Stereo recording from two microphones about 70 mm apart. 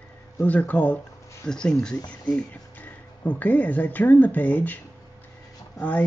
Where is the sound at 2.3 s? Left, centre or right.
Left.